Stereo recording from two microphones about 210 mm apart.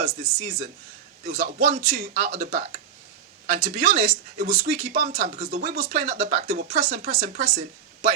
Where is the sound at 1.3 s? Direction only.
35° right (ahead or behind).